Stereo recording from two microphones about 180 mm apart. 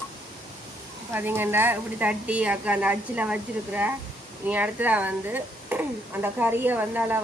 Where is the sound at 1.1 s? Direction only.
10° right (ahead or behind).